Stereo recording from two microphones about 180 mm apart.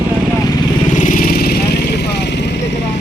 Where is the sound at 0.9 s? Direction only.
45° left (ahead or behind); by 2.4 s 65° left (ahead or behind).